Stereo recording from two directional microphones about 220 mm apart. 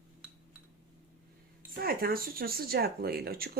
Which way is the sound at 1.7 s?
40° right (ahead or behind).